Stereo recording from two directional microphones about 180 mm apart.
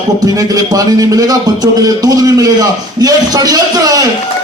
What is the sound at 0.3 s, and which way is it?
A man's voice, 20° right (ahead or behind).